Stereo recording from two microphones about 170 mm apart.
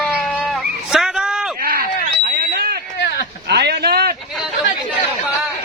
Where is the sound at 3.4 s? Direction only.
75° right (ahead or behind).